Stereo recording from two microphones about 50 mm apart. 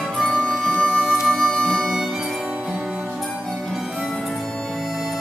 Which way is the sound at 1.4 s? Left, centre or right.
Centre.